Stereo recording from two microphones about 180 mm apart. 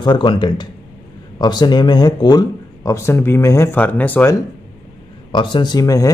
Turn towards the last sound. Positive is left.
turn(degrees=20)  # may be behind; listen again after turning